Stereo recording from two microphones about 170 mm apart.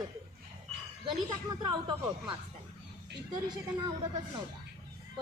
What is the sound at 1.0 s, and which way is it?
A woman's voice, 25° right (ahead or behind).